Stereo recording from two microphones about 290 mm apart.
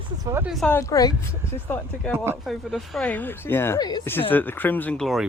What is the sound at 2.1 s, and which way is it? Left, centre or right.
Speech, centre.